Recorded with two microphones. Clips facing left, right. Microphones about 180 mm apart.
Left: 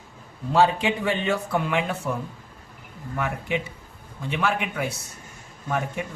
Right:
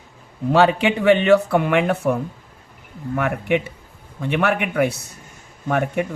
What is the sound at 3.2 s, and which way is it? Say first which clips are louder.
Speech: right 7 dB; 60° right (ahead or behind).